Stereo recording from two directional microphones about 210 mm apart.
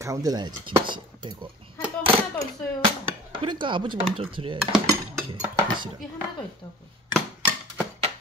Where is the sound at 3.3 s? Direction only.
25° right (ahead or behind).